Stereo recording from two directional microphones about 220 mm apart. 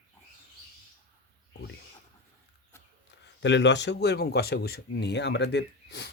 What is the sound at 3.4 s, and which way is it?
Speech, 55° left (ahead or behind).